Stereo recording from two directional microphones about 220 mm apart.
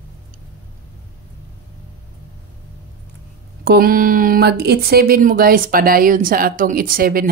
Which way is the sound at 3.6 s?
45° right (ahead or behind).